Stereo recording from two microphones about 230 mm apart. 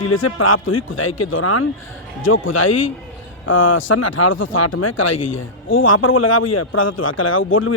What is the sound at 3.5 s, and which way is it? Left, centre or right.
Speech, left.